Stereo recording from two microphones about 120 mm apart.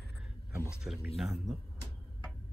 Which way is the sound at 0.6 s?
5° right (ahead or behind).